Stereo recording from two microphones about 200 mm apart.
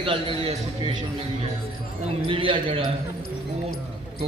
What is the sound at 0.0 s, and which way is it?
Speech, 25° right (ahead or behind).